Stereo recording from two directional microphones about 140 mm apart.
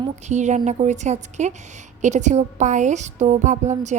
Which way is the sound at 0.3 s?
55° right (ahead or behind).